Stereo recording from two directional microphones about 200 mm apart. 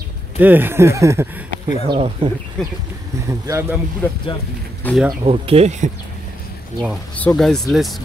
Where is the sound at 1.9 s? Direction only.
25° right (ahead or behind).